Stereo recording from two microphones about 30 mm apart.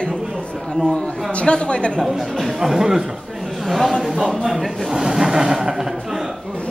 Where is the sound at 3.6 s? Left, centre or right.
Centre.